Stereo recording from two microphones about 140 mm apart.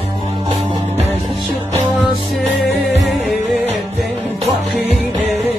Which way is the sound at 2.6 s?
Centre (ahead or behind).